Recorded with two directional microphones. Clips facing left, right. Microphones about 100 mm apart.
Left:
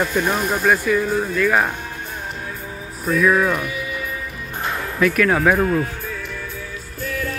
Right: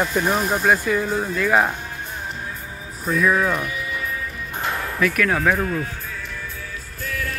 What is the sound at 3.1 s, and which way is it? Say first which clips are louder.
Speech: left 2 dB; 5° right (ahead or behind).